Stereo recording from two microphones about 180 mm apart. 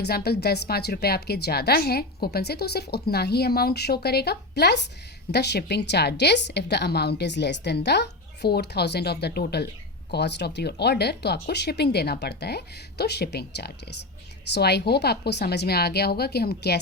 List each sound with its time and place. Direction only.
0.0 s a woman's voice: 65° left (ahead or behind)